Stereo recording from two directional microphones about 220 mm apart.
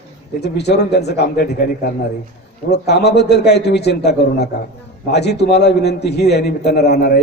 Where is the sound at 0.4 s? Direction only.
50° left (ahead or behind).